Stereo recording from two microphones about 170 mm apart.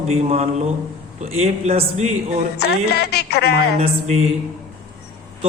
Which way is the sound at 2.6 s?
75° left (ahead or behind).